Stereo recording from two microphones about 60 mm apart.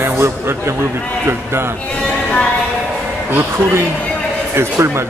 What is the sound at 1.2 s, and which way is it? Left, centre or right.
Speech, right.